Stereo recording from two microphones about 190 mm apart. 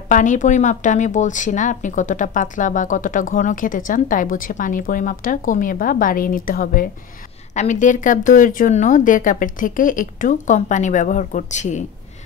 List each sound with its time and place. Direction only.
0.1 s speech: 40° left (ahead or behind)